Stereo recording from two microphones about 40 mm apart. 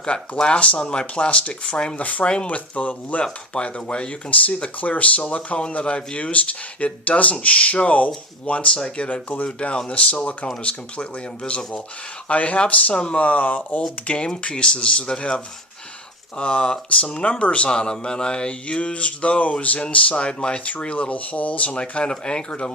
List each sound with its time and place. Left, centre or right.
0.1 s speech: left
2.0 s speech: left
2.2 s speech: left
2.5 s speech: left
3.5 s speech: left
12.3 s speech: left
13.2 s speech: left
14.5 s speech: left
16.4 s speech: left
17.7 s speech: left
21.7 s speech: left